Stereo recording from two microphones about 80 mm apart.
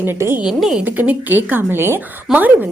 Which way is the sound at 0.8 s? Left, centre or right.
Right.